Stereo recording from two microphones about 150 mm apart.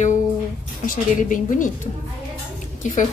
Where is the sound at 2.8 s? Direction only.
55° left (ahead or behind).